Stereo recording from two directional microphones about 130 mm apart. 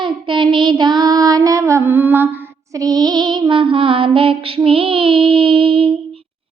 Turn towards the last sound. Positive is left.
turn(degrees=-45)  # may be behind; listen again after turning